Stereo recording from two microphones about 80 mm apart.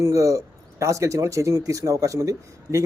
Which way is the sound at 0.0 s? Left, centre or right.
Right.